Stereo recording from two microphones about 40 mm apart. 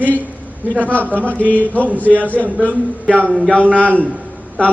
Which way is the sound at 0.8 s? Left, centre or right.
Left.